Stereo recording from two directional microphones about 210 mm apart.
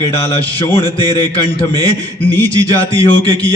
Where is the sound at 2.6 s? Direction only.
25° left (ahead or behind).